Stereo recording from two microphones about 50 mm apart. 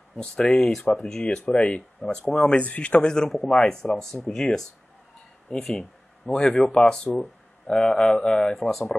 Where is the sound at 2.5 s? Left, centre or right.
Left; by 8.9 s centre.